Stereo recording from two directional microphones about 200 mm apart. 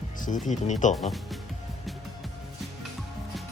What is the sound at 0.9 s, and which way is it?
Speech, centre (ahead or behind).